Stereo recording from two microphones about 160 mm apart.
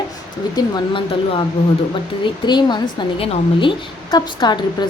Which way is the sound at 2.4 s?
30° left (ahead or behind).